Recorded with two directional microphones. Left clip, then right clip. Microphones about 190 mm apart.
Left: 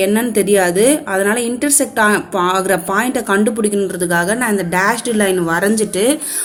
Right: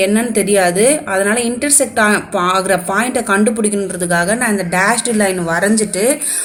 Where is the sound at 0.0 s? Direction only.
30° left (ahead or behind).